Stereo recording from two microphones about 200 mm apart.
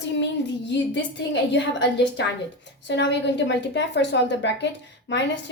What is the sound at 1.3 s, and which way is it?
A woman's voice, 65° left (ahead or behind).